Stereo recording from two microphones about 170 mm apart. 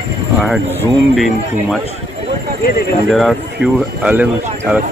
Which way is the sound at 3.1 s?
Centre (ahead or behind).